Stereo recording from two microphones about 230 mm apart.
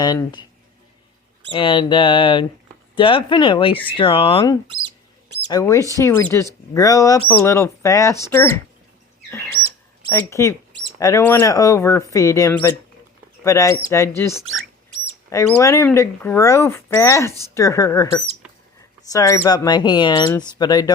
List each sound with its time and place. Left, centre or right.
0.0 s speech: centre
1.5 s speech: left
9.3 s chirp: centre
10.1 s speech: centre
19.1 s speech: centre